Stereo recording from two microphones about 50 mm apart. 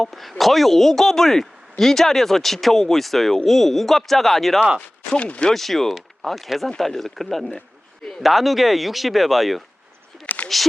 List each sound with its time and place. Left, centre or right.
0.0 s speech: centre
5.1 s speech: left
5.5 s speech: centre
10.2 s a sound: left